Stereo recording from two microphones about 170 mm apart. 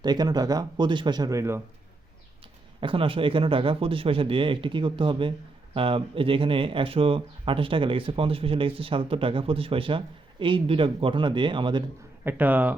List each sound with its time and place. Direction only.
0.0 s speech: 25° right (ahead or behind)
2.8 s speech: 30° right (ahead or behind)
12.2 s speech: 10° right (ahead or behind)